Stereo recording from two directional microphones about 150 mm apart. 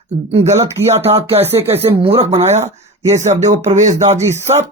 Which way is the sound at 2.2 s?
40° right (ahead or behind).